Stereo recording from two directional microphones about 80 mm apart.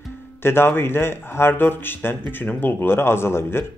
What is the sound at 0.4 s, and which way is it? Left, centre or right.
A man's voice, left.